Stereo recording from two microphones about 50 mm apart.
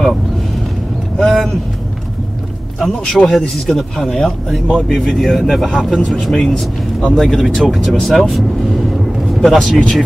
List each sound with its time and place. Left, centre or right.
1.1 s vehicle: centre
2.8 s speech: centre
6.3 s speech: centre
7.2 s speech: centre